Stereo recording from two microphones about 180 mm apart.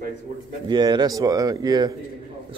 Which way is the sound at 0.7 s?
25° right (ahead or behind).